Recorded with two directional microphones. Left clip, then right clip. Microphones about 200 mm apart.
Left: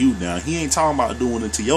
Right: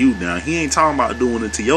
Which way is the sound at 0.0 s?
10° left (ahead or behind).